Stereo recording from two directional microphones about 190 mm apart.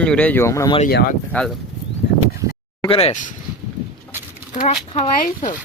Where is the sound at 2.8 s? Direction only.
30° left (ahead or behind).